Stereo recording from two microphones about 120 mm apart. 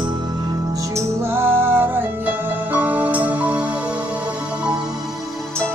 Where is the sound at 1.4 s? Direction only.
20° right (ahead or behind).